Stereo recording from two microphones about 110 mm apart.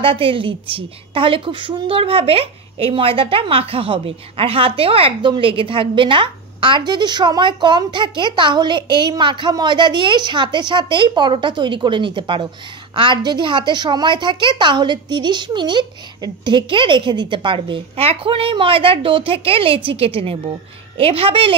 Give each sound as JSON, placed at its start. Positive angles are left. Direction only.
{"t": 0.0, "sound": "a woman's voice", "side_deg": -55}